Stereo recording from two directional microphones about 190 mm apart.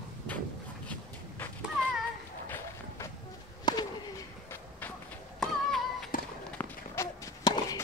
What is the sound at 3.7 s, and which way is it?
Bird, 20° left (ahead or behind).